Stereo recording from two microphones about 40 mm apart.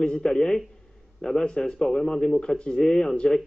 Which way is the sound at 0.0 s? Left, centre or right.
Left.